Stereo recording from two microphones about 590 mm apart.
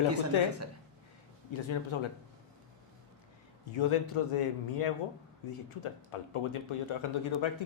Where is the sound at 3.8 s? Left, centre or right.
Left.